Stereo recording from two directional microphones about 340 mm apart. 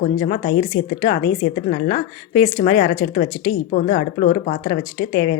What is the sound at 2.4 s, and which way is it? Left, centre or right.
A woman's voice, left.